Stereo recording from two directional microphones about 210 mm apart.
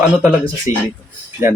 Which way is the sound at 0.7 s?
35° left (ahead or behind).